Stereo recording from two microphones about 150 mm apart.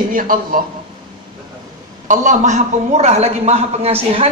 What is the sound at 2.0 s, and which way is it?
A man's voice, 55° right (ahead or behind).